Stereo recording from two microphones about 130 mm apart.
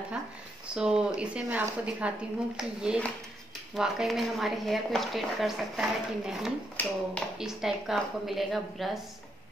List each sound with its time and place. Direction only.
0.7 s a woman's voice: 5° right (ahead or behind)
6.8 s speech: 10° left (ahead or behind)
7.3 s a woman's voice: 5° right (ahead or behind)